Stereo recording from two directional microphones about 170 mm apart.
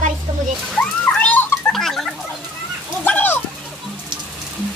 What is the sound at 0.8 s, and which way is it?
Cat, 5° left (ahead or behind).